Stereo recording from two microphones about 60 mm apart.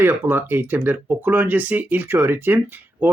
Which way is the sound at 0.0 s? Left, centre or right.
Right.